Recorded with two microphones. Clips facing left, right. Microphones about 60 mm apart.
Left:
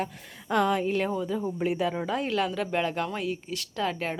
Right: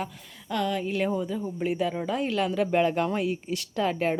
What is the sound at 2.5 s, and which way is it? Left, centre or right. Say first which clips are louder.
Speech: right 5 dB; centre.